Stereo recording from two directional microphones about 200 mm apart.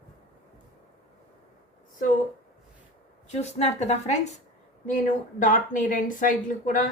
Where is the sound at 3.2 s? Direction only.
35° left (ahead or behind).